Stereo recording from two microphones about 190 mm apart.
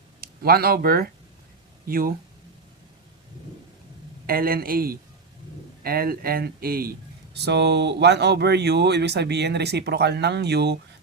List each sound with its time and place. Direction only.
0.2 s speech: 50° right (ahead or behind)
4.3 s speech: 50° right (ahead or behind)